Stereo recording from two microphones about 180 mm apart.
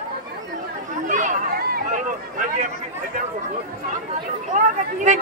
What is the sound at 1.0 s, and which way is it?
Chatter, 45° right (ahead or behind).